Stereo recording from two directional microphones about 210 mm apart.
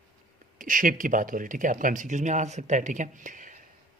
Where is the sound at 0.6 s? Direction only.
40° right (ahead or behind).